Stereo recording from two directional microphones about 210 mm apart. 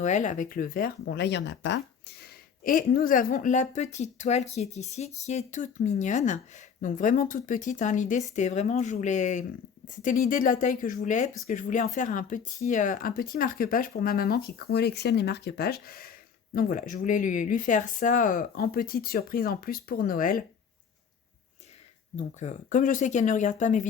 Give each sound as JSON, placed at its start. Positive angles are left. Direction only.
{"t": 0.0, "sound": "speech", "side_deg": 35}
{"t": 22.4, "sound": "speech", "side_deg": 35}